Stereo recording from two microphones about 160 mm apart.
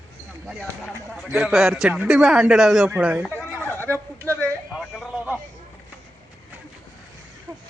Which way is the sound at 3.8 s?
15° right (ahead or behind).